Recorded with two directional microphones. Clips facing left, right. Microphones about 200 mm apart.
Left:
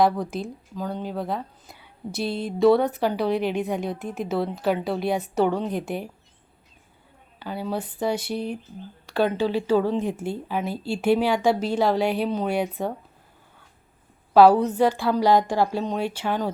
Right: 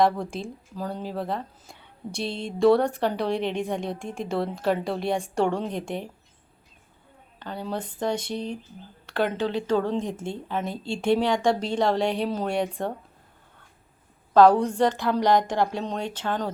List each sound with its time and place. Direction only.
0.0 s speech: centre (ahead or behind)
7.3 s speech: 5° left (ahead or behind)
14.3 s speech: 5° left (ahead or behind)